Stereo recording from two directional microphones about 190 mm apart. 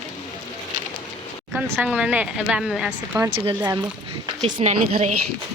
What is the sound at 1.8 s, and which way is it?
A woman's voice, 5° right (ahead or behind).